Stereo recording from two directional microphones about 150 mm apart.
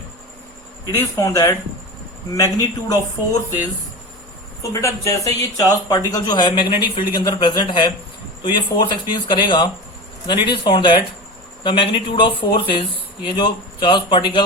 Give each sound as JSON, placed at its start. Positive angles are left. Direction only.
{"t": 0.9, "sound": "speech", "side_deg": 20}
{"t": 4.6, "sound": "speech", "side_deg": 20}